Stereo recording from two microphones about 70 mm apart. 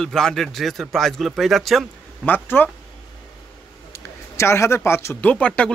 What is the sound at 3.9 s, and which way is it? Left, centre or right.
A man's voice, left.